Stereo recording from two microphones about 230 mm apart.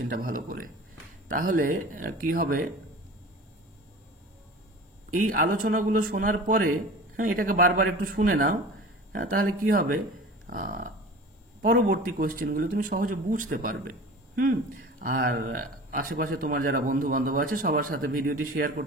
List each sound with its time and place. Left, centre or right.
0.1 s speech: right
5.1 s speech: right
10.4 s a sound: right
11.6 s speech: right
15.0 s speech: right